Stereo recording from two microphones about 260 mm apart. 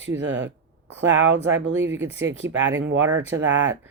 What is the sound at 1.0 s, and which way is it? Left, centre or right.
Speech, right.